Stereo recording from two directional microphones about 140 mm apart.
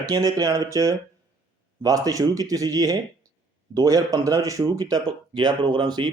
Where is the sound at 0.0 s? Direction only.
25° right (ahead or behind).